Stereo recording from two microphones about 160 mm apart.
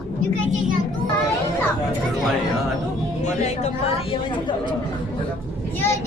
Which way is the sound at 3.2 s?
45° left (ahead or behind).